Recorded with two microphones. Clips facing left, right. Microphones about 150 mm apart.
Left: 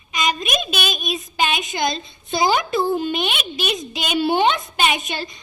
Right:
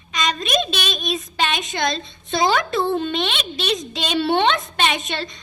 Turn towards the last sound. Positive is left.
turn(degrees=0)  # may be behind; listen again after turning